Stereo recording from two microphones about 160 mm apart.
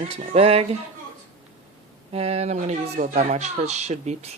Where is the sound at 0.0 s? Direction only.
40° right (ahead or behind).